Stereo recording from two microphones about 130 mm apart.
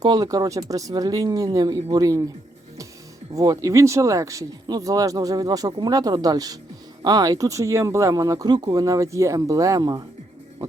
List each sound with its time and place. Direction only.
0.0 s speech: 30° right (ahead or behind)
3.3 s speech: 25° right (ahead or behind)